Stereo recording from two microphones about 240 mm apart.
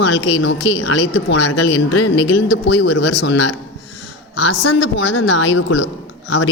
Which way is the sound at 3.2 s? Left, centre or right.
Left.